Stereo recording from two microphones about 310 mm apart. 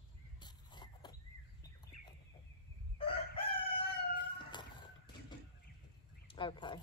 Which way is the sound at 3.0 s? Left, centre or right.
Centre.